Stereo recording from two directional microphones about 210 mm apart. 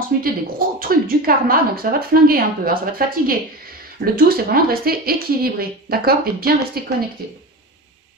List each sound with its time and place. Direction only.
0.2 s speech: 45° right (ahead or behind)